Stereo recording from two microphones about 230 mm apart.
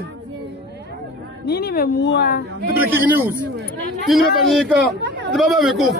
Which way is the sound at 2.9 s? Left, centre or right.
Centre.